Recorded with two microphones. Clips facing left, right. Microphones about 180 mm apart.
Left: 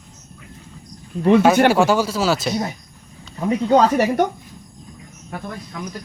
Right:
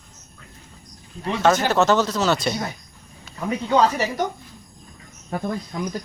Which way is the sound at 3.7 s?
55° left (ahead or behind).